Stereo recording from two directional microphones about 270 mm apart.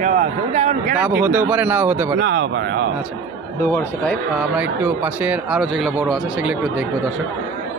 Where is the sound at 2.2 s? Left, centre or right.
Right.